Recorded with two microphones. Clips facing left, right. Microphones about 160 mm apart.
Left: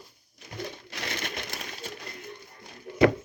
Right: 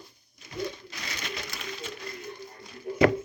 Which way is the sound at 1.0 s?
55° left (ahead or behind).